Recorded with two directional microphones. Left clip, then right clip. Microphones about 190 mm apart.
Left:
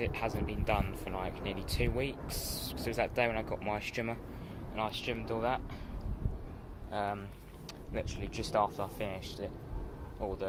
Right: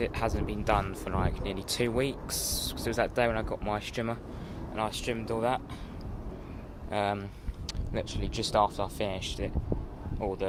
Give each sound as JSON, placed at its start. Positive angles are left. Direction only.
{"t": 0.0, "sound": "speech", "side_deg": -25}
{"t": 6.9, "sound": "speech", "side_deg": -40}
{"t": 7.7, "sound": "speech", "side_deg": -25}